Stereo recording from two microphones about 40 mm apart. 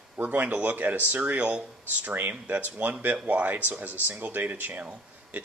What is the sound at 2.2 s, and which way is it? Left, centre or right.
Speech, right.